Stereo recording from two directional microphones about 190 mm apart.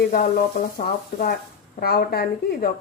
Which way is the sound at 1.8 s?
55° left (ahead or behind).